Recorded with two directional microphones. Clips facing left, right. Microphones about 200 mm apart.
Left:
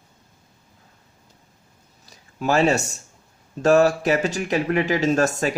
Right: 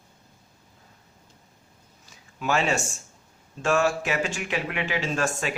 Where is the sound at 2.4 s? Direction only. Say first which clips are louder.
Left 6 dB; 40° left (ahead or behind).